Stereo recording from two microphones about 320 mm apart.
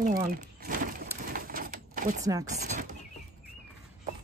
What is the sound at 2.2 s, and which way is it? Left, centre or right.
Speech, centre.